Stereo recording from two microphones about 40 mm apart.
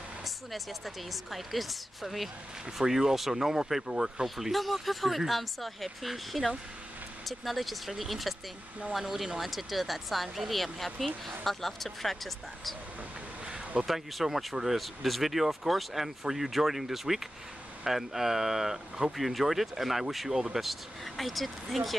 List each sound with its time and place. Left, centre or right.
0.2 s speech: centre
2.8 s speech: centre
4.5 s speech: centre
13.8 s speech: centre
19.1 s speech: centre